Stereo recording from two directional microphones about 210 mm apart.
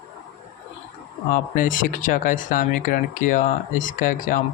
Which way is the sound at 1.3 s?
40° left (ahead or behind).